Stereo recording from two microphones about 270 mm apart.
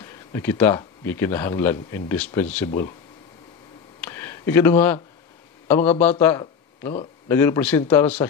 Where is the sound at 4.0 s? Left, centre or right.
Centre.